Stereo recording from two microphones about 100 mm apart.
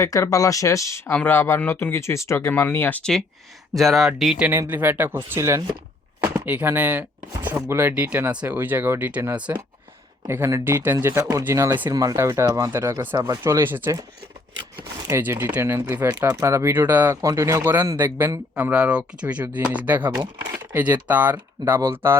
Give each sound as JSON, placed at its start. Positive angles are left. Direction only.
{"t": 0.0, "sound": "speech", "side_deg": 35}
{"t": 1.1, "sound": "speech", "side_deg": 20}
{"t": 3.0, "sound": "speech", "side_deg": 5}
{"t": 4.4, "sound": "speech", "side_deg": -20}
{"t": 6.2, "sound": "speech", "side_deg": -15}
{"t": 11.9, "sound": "speech", "side_deg": -35}
{"t": 12.1, "sound": "speech", "side_deg": -25}
{"t": 13.1, "sound": "speech", "side_deg": -35}
{"t": 13.4, "sound": "speech", "side_deg": -25}
{"t": 15.2, "sound": "speech", "side_deg": -20}
{"t": 16.2, "sound": "speech", "side_deg": -35}
{"t": 17.2, "sound": "speech", "side_deg": -30}